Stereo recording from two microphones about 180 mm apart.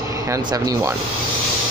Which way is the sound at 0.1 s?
20° right (ahead or behind).